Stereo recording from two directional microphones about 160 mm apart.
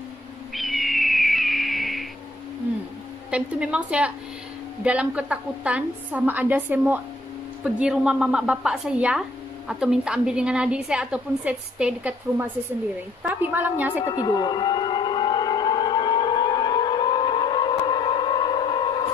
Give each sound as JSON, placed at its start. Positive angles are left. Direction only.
{"t": 0.6, "sound": "owl", "side_deg": 0}
{"t": 3.3, "sound": "a woman's voice", "side_deg": -5}
{"t": 14.0, "sound": "civil defense siren", "side_deg": 25}